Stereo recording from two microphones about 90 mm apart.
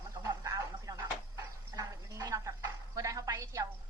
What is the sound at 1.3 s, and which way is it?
Dog, 40° right (ahead or behind).